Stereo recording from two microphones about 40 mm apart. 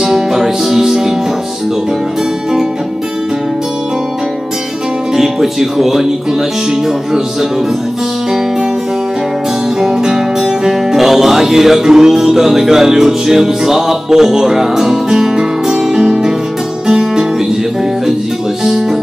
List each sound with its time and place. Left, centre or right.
0.0 s music: centre
5.1 s speech: centre
9.8 s music: centre
18.6 s music: centre